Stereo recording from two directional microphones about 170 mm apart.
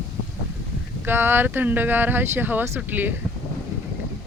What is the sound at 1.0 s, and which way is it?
Speech, 10° right (ahead or behind).